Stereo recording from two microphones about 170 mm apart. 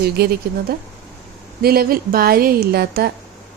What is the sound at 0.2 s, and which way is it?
Speech, 75° right (ahead or behind).